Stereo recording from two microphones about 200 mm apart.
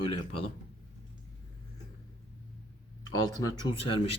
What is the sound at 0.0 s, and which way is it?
Speech, 25° left (ahead or behind).